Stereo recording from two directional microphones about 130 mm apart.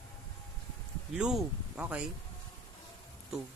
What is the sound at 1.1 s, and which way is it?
Speech, 5° right (ahead or behind).